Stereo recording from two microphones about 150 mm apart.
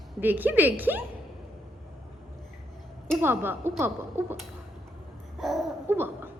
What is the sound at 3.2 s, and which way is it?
Speech, 15° right (ahead or behind).